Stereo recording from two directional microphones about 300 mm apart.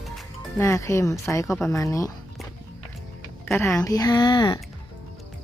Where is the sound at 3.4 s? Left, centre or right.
Centre.